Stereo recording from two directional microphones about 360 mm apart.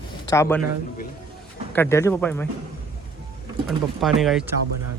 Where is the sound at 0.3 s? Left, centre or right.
Centre.